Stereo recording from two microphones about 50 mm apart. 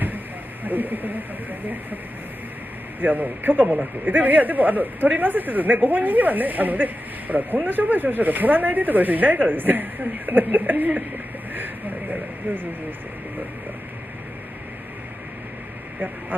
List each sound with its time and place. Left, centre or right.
0.7 s speech: right
3.0 s a man's voice: right
11.5 s a sound: right